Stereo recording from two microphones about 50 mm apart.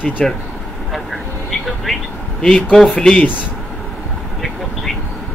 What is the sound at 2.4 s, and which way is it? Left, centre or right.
Speech, centre.